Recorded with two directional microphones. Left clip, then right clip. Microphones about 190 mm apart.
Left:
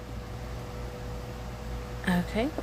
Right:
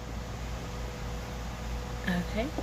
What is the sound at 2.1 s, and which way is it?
Speech, 50° left (ahead or behind).